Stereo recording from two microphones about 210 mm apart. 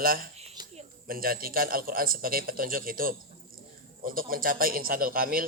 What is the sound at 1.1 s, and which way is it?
Speech, 45° right (ahead or behind).